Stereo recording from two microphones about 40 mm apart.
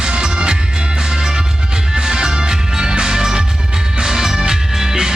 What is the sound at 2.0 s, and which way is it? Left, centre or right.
Music, centre.